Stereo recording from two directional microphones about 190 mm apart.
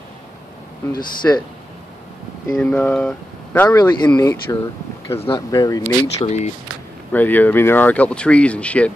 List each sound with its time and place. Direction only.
1.2 s speech: 10° left (ahead or behind)
2.5 s speech: 10° left (ahead or behind)
6.2 s speech: 35° left (ahead or behind)
7.1 s speech: 10° left (ahead or behind)